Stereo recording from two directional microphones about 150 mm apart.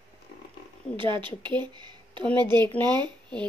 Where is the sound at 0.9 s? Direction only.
35° right (ahead or behind).